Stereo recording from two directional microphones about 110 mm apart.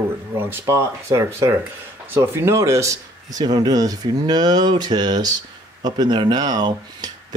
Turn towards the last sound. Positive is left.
turn(degrees=-40)  # may be behind; listen again after turning